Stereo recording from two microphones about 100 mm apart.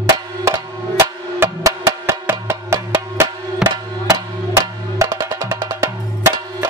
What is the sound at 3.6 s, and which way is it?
Music, 5° right (ahead or behind).